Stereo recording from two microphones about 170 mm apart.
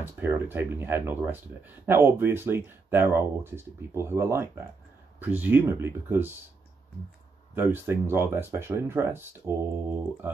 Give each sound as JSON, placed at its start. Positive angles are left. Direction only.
{"t": 0.0, "sound": "speech", "side_deg": -10}
{"t": 7.5, "sound": "speech", "side_deg": -10}